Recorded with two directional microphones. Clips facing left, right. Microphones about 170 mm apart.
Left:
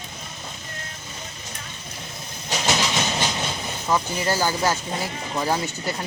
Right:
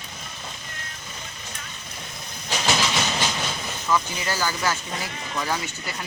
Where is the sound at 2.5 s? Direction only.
20° left (ahead or behind).